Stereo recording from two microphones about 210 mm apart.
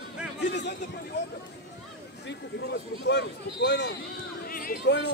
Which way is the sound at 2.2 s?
55° left (ahead or behind).